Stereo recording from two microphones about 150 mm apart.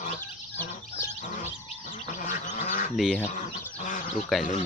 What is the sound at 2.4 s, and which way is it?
Duck, 55° left (ahead or behind).